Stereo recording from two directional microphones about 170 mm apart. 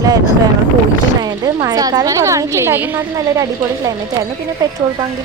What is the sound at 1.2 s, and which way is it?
A woman's voice, 25° right (ahead or behind).